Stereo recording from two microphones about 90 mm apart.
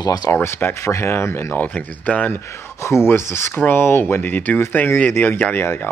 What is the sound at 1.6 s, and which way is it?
Speech, 15° left (ahead or behind).